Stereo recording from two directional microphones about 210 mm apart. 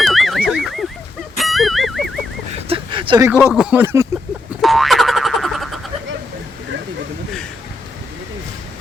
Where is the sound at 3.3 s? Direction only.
5° right (ahead or behind).